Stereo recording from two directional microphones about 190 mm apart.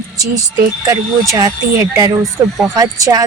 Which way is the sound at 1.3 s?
15° right (ahead or behind).